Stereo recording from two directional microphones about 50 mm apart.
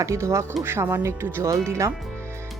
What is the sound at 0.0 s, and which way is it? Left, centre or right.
Speech, right.